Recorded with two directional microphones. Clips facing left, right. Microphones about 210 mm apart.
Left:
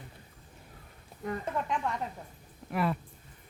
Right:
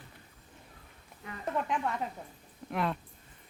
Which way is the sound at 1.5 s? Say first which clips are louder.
Right 4 dB; centre (ahead or behind).